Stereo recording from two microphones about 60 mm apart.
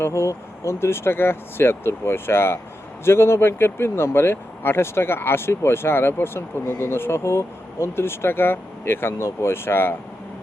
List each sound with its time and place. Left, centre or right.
0.0 s speech: left